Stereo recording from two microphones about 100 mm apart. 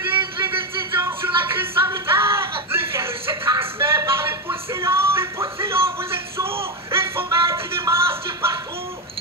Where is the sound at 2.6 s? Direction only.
25° right (ahead or behind).